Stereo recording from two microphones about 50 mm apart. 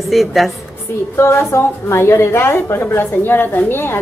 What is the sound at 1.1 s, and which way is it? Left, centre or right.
A woman's voice, left.